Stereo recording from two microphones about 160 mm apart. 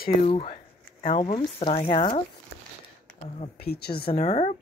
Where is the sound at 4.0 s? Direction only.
40° left (ahead or behind).